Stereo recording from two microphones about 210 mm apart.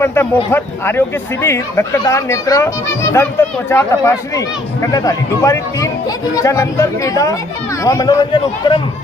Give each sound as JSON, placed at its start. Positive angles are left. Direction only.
{"t": 0.0, "sound": "a man's voice", "side_deg": 10}